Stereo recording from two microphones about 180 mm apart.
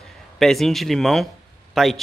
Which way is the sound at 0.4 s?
Centre (ahead or behind).